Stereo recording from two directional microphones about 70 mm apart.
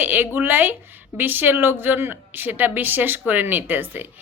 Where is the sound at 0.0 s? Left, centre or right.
Right.